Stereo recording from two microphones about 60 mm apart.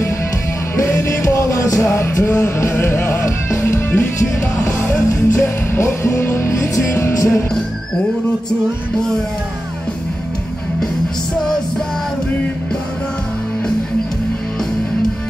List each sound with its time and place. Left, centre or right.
0.7 s music: left
1.9 s music: left